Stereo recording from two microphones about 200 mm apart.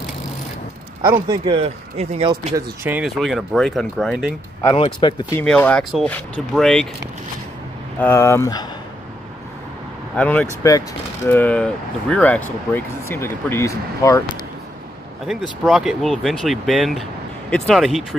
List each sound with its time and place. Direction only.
1.0 s speech: 15° right (ahead or behind)
2.5 s speech: 15° right (ahead or behind)
3.0 s speech: centre (ahead or behind)
4.7 s speech: 25° left (ahead or behind)
5.4 s speech: 5° left (ahead or behind)
8.0 s speech: 10° left (ahead or behind)
10.1 s speech: 5° left (ahead or behind)
15.6 s speech: centre (ahead or behind)